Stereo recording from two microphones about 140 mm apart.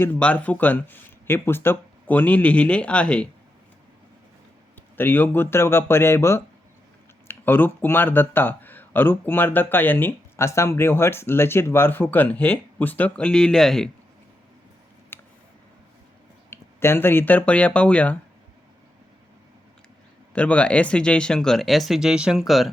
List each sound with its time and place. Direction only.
0.0 s speech: 10° left (ahead or behind)
4.9 s speech: 15° left (ahead or behind)
15.1 s a sound: 15° left (ahead or behind)
16.5 s speech: 15° left (ahead or behind)
20.3 s speech: 10° left (ahead or behind)